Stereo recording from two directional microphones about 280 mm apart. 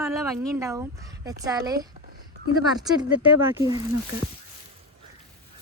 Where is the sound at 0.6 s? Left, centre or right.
Centre.